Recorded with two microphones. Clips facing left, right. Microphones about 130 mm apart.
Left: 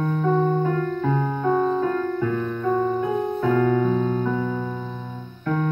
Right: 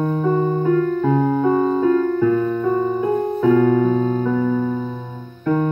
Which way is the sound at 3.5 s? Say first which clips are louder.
Right 4 dB; 25° right (ahead or behind).